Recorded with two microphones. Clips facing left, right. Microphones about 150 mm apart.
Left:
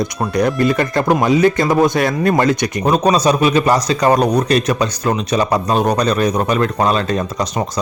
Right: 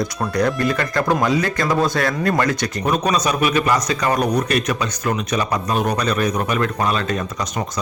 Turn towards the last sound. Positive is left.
turn(degrees=35)  # may be behind; listen again after turning